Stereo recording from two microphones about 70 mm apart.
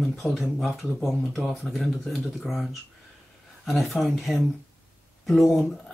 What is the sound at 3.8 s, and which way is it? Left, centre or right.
Speech, centre.